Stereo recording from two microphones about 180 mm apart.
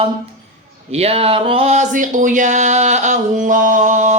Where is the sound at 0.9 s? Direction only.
35° right (ahead or behind).